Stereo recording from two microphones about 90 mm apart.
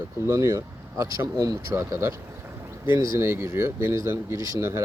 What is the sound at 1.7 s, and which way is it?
Speech, 30° right (ahead or behind).